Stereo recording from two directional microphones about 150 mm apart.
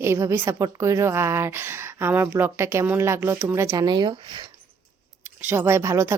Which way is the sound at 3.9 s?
30° right (ahead or behind).